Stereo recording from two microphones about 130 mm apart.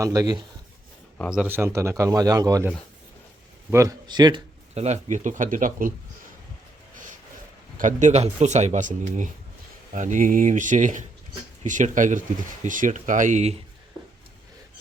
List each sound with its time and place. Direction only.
0.0 s a man's voice: 30° right (ahead or behind)
1.5 s a man's voice: 20° right (ahead or behind)
3.7 s speech: 25° right (ahead or behind)
4.7 s speech: 60° right (ahead or behind); by 5.9 s 90° right
7.8 s speech: 75° right (ahead or behind)